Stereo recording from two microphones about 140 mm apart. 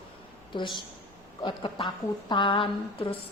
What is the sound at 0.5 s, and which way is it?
A woman's voice, 35° left (ahead or behind).